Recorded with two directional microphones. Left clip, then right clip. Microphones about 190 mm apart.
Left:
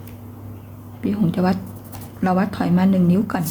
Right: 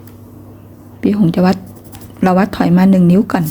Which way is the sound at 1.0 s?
40° right (ahead or behind).